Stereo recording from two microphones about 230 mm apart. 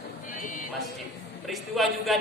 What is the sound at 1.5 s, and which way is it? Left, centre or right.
Speech, centre.